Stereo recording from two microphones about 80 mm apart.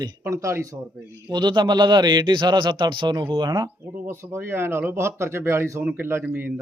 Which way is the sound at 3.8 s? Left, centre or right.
Right.